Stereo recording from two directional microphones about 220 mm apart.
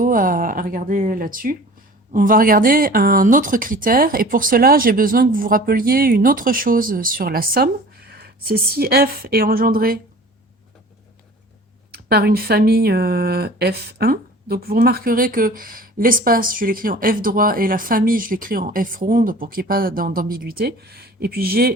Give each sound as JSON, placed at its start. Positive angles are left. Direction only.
{"t": 0.0, "sound": "a woman's voice", "side_deg": -40}
{"t": 11.9, "sound": "speech", "side_deg": -45}